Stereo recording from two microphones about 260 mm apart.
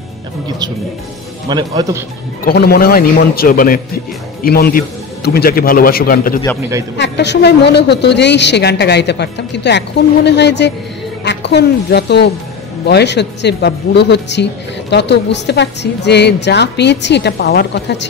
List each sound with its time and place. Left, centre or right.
1.5 s a man's voice: centre
2.4 s speech: left